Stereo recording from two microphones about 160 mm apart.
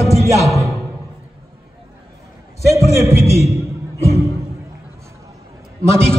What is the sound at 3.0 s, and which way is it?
Speech, 15° right (ahead or behind).